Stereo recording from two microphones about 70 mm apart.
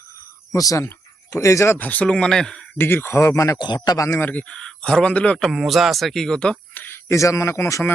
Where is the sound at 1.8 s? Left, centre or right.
Left.